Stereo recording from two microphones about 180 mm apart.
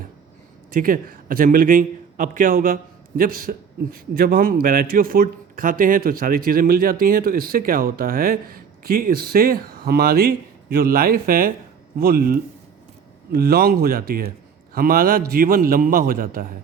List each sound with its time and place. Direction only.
0.7 s a man's voice: 50° right (ahead or behind)